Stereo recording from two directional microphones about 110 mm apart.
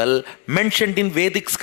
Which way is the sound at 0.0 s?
20° left (ahead or behind).